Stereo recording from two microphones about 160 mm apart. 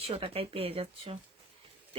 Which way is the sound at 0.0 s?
40° right (ahead or behind).